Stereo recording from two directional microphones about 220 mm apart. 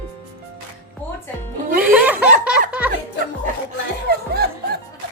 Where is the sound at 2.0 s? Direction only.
5° right (ahead or behind).